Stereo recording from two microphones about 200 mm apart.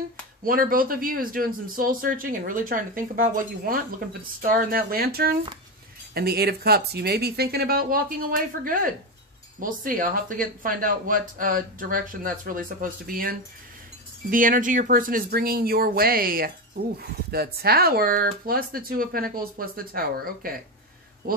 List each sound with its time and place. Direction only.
0.5 s speech: 45° right (ahead or behind)